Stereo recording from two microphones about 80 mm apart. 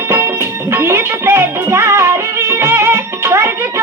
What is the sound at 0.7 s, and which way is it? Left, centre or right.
Music, right.